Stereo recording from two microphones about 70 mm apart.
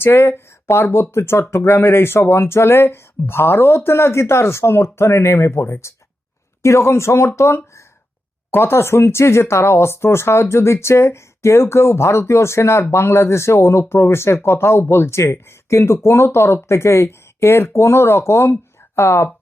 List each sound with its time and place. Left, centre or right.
0.0 s speech: left